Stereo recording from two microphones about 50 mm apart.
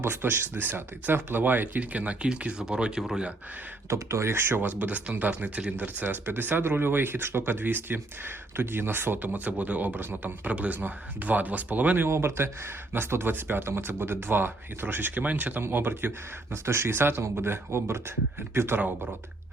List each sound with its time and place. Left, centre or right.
0.0 s speech: right; by 3.1 s centre
3.8 s speech: right
4.3 s speech: right
9.9 s speech: right
10.4 s speech: right
12.0 s speech: right
15.7 s speech: right